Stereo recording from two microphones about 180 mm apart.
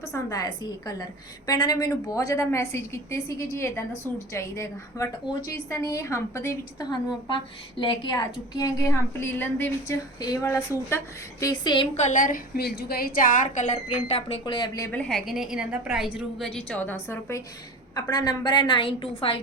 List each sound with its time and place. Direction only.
0.0 s a woman's voice: 15° left (ahead or behind)
11.9 s a woman's voice: 45° left (ahead or behind); by 14.8 s 20° left (ahead or behind)
14.9 s a woman's voice: 5° left (ahead or behind); by 19.4 s 30° left (ahead or behind)